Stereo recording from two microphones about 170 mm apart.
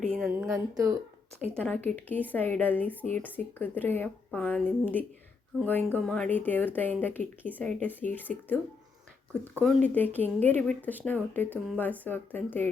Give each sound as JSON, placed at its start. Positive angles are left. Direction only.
{"t": 0.0, "sound": "a sound", "side_deg": 5}
{"t": 0.3, "sound": "a woman's voice", "side_deg": -15}
{"t": 1.5, "sound": "speech", "side_deg": 10}